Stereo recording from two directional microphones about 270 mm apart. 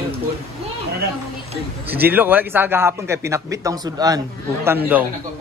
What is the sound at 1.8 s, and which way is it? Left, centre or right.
A man's voice, centre.